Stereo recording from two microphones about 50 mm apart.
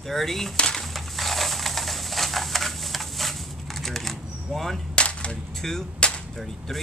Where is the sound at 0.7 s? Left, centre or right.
Centre.